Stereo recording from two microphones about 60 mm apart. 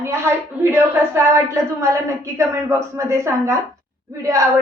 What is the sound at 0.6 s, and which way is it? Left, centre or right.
Speech, right.